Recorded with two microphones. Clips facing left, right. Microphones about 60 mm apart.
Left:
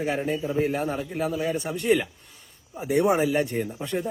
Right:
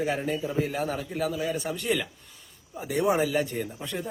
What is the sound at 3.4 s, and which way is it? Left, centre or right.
Speech, left.